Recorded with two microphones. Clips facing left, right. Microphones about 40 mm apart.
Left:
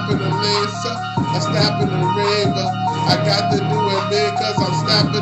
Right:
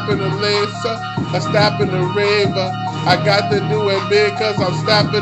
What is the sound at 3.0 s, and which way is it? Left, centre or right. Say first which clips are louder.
Speech: right 5 dB; right.